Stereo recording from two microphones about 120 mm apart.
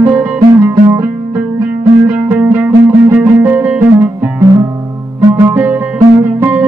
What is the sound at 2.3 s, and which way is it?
Music, 15° right (ahead or behind).